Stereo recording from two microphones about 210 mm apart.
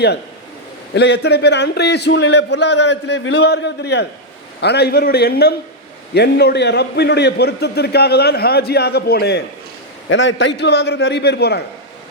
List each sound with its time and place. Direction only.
0.9 s a man's voice: 55° left (ahead or behind)